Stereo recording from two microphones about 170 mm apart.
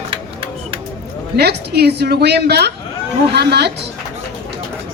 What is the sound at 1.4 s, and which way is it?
A woman's voice, 70° right (ahead or behind).